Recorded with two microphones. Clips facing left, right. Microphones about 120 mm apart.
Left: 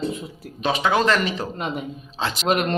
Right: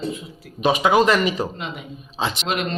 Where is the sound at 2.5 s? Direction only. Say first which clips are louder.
Left 6 dB; 45° left (ahead or behind).